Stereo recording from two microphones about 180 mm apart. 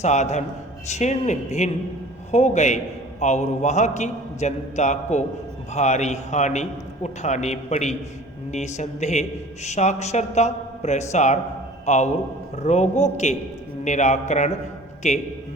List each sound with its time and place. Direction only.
0.0 s a man's voice: 40° left (ahead or behind)